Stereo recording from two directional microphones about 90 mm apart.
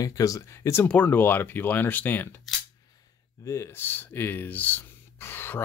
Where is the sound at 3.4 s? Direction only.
30° left (ahead or behind).